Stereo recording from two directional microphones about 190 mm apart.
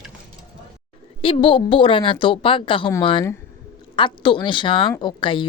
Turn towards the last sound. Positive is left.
turn(degrees=25)  # may be behind; listen again after turning